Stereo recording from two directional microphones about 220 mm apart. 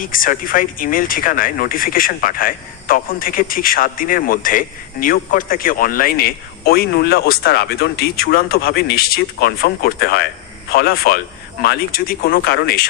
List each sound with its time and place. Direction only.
0.0 s speech: 40° left (ahead or behind)